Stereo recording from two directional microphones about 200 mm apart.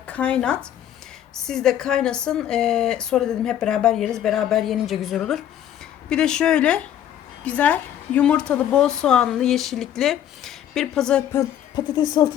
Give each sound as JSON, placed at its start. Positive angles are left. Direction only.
{"t": 0.1, "sound": "a woman's voice", "side_deg": 5}
{"t": 11.3, "sound": "speech", "side_deg": 20}